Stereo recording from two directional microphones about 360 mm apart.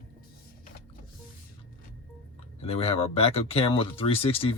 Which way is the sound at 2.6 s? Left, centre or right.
Centre.